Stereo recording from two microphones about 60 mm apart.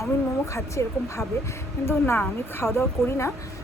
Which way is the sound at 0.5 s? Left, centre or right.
Left.